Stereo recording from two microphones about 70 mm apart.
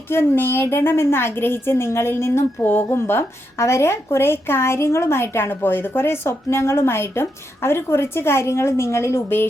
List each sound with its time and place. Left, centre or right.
0.1 s speech: left